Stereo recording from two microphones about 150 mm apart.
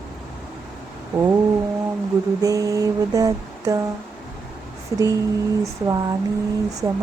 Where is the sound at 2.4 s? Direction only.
25° right (ahead or behind).